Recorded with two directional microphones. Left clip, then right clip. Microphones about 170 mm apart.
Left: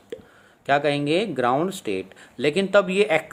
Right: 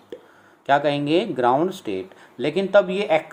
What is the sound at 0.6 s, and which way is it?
Speech, 25° left (ahead or behind).